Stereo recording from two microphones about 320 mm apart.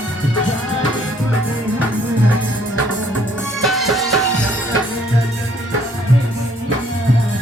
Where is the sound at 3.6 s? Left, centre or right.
Centre.